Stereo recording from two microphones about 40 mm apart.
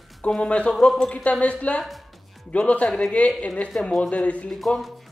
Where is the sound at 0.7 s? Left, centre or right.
Centre.